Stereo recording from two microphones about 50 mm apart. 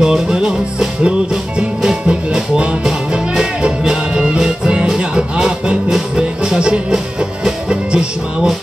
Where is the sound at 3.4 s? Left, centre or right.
Centre.